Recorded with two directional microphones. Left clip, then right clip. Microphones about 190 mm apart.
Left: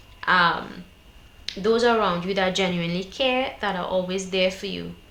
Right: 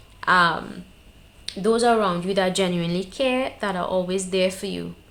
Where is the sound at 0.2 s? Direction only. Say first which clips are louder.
Right 1 dB; 45° right (ahead or behind).